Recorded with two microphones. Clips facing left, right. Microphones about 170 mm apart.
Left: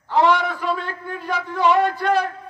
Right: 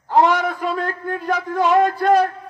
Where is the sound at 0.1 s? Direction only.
45° right (ahead or behind).